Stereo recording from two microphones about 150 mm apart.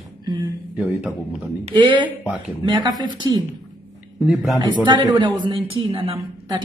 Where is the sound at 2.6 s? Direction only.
30° right (ahead or behind).